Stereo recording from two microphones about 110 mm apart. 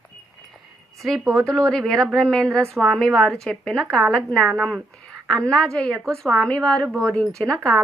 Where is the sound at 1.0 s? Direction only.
Centre (ahead or behind).